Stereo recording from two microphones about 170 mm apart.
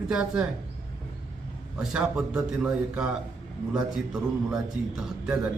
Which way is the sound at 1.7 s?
5° right (ahead or behind).